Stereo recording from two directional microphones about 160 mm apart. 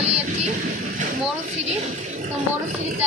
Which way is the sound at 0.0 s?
40° right (ahead or behind).